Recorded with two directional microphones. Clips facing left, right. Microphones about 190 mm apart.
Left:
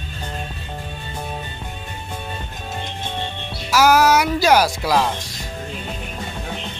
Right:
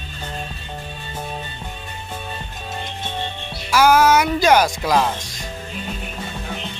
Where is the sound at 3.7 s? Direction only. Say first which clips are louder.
Even; 5° left (ahead or behind).